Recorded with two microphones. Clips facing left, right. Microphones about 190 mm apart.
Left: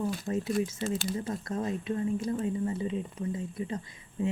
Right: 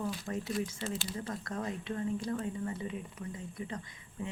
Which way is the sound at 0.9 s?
45° left (ahead or behind).